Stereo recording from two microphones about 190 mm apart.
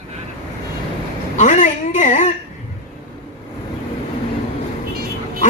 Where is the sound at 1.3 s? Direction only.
40° left (ahead or behind).